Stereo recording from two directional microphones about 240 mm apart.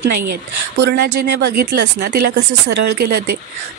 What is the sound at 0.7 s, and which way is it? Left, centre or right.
A woman's voice, right.